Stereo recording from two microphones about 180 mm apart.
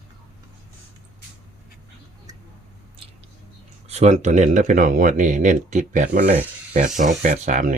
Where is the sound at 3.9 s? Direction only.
40° right (ahead or behind).